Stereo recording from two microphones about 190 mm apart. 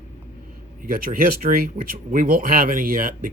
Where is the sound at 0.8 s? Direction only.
45° right (ahead or behind).